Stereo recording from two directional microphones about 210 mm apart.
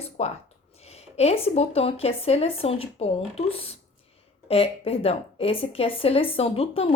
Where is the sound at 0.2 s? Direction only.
30° left (ahead or behind).